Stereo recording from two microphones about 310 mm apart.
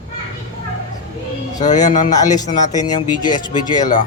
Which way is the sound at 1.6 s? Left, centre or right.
Left.